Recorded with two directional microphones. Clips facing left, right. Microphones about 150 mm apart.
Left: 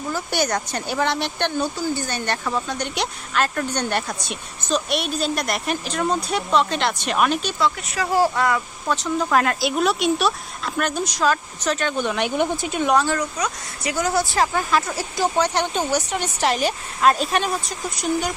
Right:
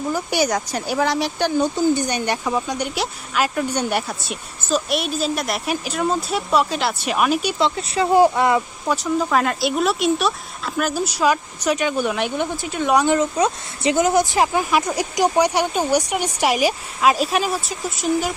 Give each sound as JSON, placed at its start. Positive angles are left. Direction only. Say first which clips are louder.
{"t": 0.1, "sound": "speech", "louder": "right 2 dB", "side_deg": -10}
{"t": 7.6, "sound": "speech", "louder": "right 3 dB", "side_deg": -30}
{"t": 8.9, "sound": "speech", "louder": "right 1 dB", "side_deg": -10}
{"t": 12.9, "sound": "speech", "louder": "right 4 dB", "side_deg": -15}